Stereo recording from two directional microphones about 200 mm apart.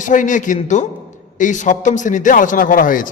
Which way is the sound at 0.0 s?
40° left (ahead or behind).